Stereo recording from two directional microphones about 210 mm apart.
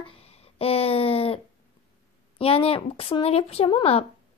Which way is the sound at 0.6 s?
30° left (ahead or behind).